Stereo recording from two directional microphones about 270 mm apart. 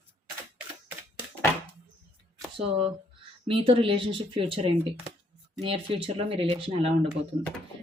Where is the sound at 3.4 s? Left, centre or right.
Centre.